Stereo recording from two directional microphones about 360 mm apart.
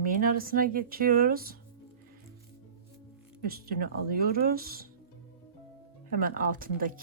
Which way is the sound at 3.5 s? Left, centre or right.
Right.